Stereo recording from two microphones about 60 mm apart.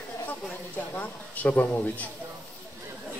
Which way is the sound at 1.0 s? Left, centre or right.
Left.